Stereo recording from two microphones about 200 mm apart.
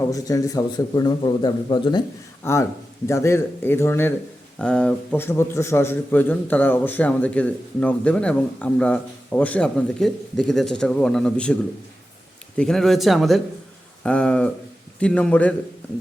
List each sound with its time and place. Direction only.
0.0 s a man's voice: 15° left (ahead or behind)
12.5 s a man's voice: centre (ahead or behind)